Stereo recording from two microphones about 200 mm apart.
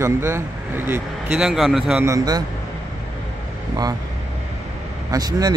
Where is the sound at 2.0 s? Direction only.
20° right (ahead or behind).